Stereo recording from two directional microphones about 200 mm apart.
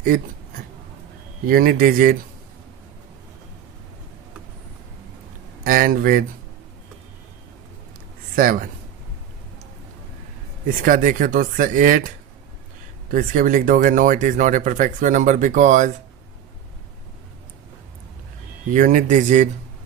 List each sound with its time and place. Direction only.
1.5 s speech: 45° right (ahead or behind)
5.6 s speech: 45° right (ahead or behind)
8.4 s speech: 45° right (ahead or behind)
10.8 s speech: 45° right (ahead or behind)
18.7 s speech: 40° right (ahead or behind)